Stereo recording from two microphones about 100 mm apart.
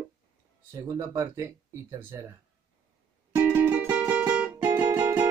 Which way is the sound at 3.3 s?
15° right (ahead or behind).